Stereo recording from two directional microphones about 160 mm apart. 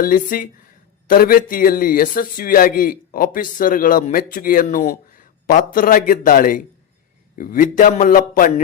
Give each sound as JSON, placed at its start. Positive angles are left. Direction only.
{"t": 0.0, "sound": "a man's voice", "side_deg": 60}